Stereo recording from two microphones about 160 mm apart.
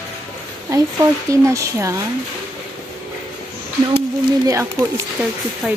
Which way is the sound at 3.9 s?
20° right (ahead or behind).